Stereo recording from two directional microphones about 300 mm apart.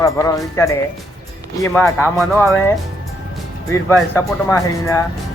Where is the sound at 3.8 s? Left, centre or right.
Centre.